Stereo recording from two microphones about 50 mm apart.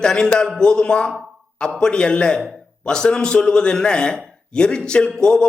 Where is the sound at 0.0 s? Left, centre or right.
Centre.